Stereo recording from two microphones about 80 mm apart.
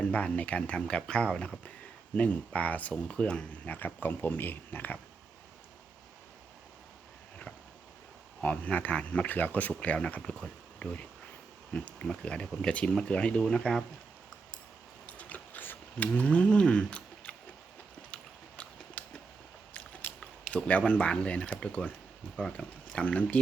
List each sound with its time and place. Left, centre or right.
0.0 s speech: centre
3.8 s speech: left
8.4 s speech: centre
15.0 s a sound: centre
20.5 s speech: centre